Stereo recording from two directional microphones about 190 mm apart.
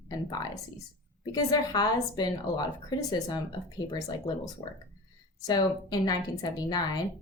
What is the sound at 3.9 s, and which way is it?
A woman's voice, 20° left (ahead or behind).